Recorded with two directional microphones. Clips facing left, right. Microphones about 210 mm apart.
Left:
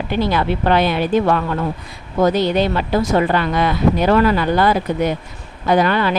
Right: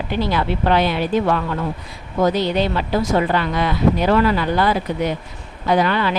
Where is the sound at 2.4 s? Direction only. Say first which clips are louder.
Left 2 dB; 50° left (ahead or behind).